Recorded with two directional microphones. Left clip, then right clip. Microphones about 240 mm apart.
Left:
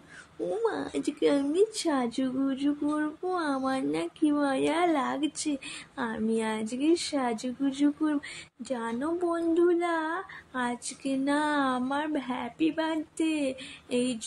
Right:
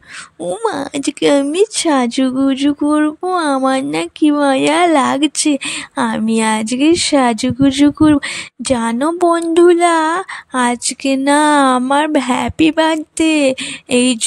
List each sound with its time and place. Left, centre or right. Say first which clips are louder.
0.7 s speech: right 12 dB; right